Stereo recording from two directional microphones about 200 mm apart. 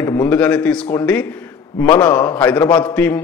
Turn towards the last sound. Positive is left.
turn(degrees=5)  # may be behind; listen again after turning